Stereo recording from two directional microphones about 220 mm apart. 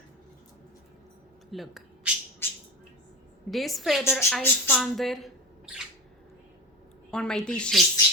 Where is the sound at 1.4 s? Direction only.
Centre (ahead or behind).